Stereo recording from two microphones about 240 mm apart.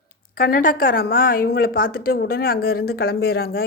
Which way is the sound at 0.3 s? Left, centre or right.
Left.